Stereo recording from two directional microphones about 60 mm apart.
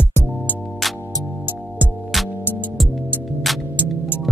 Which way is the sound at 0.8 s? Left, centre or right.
Centre.